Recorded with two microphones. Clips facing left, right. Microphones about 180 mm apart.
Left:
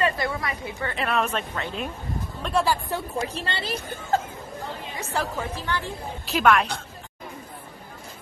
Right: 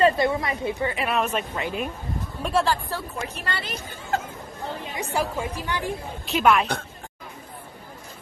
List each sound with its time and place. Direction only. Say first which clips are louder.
0.0 s a woman's voice: right 5 dB; 25° right (ahead or behind)
0.9 s speech: right 1 dB; 5° right (ahead or behind)
2.6 s speech: even; 10° left (ahead or behind)
3.2 s a woman's voice: left 2 dB; 30° left (ahead or behind)
4.9 s speech: right 2 dB; 10° right (ahead or behind)
6.2 s a woman's voice: even; centre (ahead or behind)